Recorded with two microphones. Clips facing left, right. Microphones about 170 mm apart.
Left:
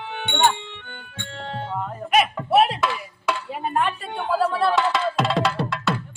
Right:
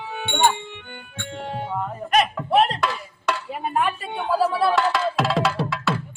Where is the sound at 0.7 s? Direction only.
10° right (ahead or behind).